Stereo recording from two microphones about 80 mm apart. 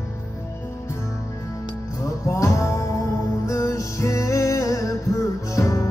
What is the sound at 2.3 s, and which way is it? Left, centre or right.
Music, left.